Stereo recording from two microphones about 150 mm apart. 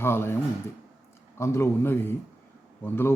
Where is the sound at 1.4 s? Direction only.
20° left (ahead or behind).